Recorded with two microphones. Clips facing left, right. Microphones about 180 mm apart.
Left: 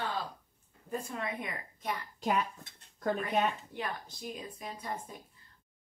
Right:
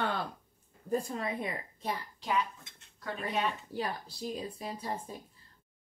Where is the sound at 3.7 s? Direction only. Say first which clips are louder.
Right 3 dB; 35° right (ahead or behind).